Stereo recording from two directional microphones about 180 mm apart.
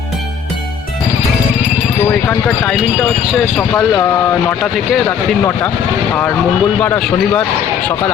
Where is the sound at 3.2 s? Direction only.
Centre (ahead or behind); by 5.7 s 15° left (ahead or behind).